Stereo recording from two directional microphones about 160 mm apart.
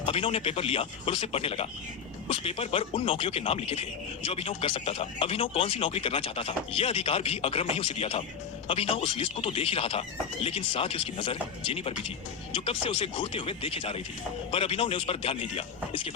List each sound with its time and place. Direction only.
0.0 s speech: 35° left (ahead or behind)